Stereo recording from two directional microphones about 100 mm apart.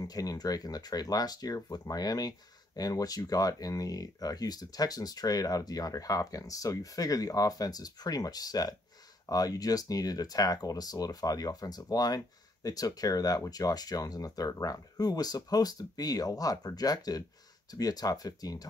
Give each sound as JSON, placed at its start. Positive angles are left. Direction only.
{"t": 0.0, "sound": "speech", "side_deg": 40}